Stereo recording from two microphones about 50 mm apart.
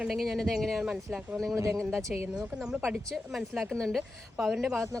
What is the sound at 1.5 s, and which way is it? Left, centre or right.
Speech, right.